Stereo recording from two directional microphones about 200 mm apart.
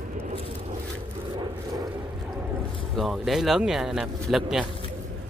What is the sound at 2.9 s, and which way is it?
Speech, centre (ahead or behind).